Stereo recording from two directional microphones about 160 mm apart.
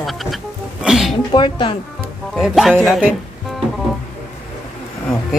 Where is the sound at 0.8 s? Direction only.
Centre (ahead or behind).